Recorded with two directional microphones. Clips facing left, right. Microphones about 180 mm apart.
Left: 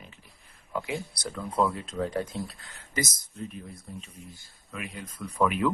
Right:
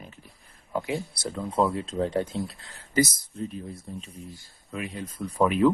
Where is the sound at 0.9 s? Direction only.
25° right (ahead or behind).